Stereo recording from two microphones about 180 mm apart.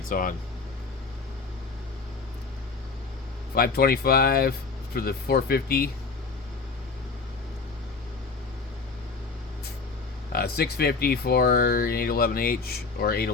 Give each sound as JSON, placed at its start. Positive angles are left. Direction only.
{"t": 0.1, "sound": "speech", "side_deg": 50}
{"t": 3.5, "sound": "speech", "side_deg": 60}
{"t": 10.3, "sound": "speech", "side_deg": 60}